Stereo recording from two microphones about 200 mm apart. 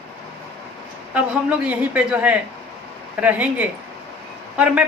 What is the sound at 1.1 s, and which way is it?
A woman's voice, 5° right (ahead or behind).